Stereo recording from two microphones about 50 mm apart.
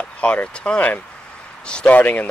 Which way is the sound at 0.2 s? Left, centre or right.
Left.